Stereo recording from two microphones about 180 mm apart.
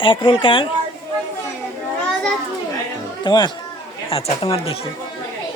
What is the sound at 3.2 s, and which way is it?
Speech, 25° left (ahead or behind).